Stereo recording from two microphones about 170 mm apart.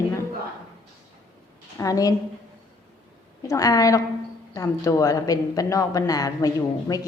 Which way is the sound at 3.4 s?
20° left (ahead or behind).